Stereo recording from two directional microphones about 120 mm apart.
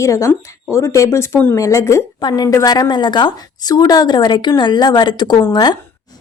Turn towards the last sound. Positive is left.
turn(degrees=35)  # may be behind; listen again after turning